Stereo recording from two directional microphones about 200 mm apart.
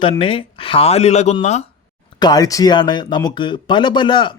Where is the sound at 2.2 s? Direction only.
20° left (ahead or behind).